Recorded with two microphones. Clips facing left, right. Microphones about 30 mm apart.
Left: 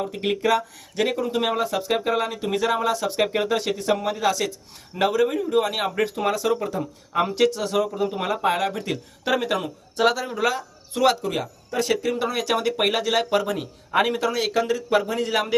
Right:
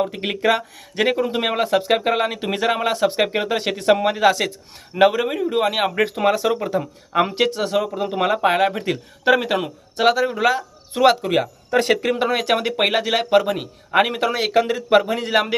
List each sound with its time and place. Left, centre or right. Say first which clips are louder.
0.0 s speech: right 3 dB; right
3.2 s speech: right 2 dB; right
3.6 s speech: right 6 dB; right
11.2 s speech: right 7 dB; right
12.3 s speech: right 3 dB; right